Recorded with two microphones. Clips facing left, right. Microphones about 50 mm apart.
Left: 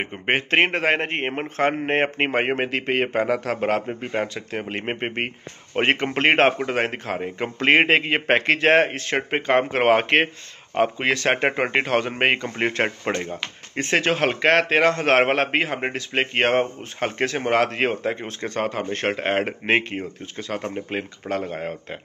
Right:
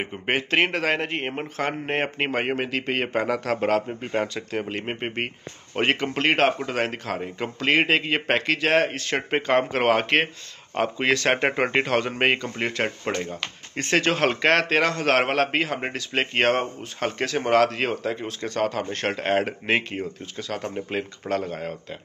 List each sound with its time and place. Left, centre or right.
0.0 s speech: left
2.9 s a man's voice: centre